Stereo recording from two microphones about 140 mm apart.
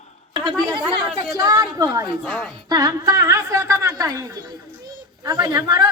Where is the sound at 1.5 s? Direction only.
25° right (ahead or behind).